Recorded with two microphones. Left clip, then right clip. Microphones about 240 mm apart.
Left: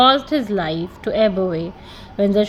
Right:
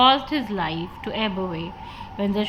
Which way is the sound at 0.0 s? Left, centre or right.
Centre.